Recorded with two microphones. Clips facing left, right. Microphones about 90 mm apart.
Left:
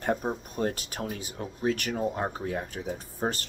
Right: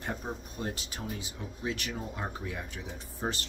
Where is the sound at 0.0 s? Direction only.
55° left (ahead or behind).